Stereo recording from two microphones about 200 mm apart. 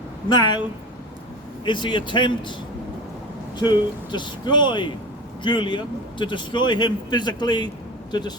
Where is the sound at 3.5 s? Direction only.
20° left (ahead or behind).